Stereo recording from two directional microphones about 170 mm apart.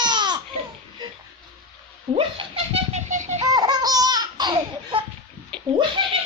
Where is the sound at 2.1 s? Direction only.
30° right (ahead or behind).